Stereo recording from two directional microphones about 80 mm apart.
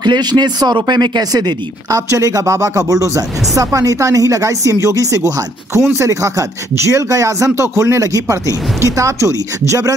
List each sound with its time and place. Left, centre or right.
0.0 s speech: right
1.9 s speech: right